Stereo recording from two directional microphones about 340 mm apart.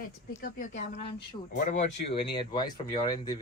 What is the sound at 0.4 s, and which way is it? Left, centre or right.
Speech, left.